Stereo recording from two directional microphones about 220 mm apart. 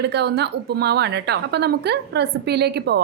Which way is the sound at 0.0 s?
50° right (ahead or behind).